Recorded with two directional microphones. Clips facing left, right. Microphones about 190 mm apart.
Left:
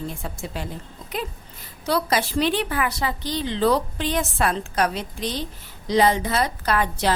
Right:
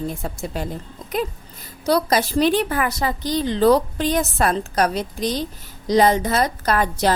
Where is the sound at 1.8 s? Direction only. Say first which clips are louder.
Right 4 dB; 40° right (ahead or behind).